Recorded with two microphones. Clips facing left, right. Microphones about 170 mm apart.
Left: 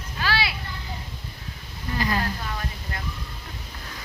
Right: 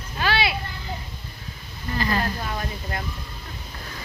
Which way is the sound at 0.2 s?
20° right (ahead or behind).